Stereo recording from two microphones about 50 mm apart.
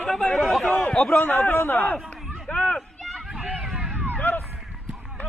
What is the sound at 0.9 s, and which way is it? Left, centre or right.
A man's voice, left.